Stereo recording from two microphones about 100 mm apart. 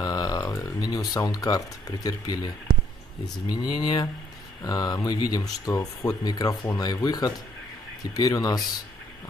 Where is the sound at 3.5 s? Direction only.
45° left (ahead or behind).